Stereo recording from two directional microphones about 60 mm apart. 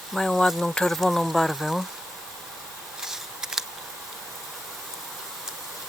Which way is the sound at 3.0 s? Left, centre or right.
Centre.